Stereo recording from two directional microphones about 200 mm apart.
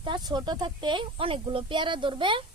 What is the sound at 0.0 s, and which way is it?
Speech, 20° right (ahead or behind).